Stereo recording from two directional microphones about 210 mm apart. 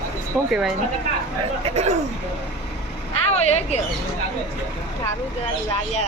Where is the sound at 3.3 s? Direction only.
30° left (ahead or behind).